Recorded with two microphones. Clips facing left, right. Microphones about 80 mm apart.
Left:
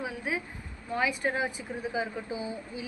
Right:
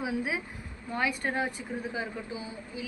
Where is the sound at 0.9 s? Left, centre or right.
Centre.